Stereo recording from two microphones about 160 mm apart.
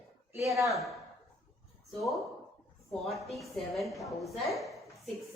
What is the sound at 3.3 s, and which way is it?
A woman's voice, centre (ahead or behind).